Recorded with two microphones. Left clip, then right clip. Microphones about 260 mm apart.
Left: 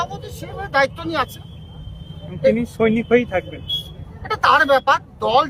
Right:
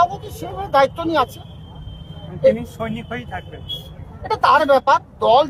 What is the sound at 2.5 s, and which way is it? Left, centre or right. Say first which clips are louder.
Speech: left 8 dB; left.